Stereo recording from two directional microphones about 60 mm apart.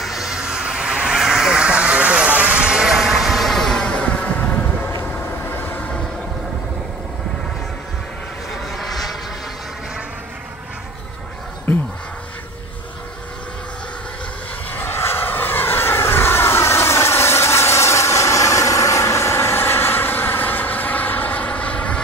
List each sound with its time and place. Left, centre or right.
0.0 s vehicle: centre
5.6 s vehicle: left
8.7 s vehicle: centre
14.8 s vehicle: left